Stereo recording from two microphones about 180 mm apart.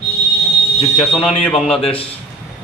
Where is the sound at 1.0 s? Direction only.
5° left (ahead or behind).